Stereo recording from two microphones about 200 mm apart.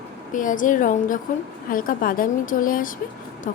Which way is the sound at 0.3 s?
40° left (ahead or behind).